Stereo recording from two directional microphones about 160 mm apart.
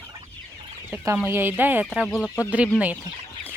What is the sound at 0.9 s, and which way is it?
Speech, 15° right (ahead or behind).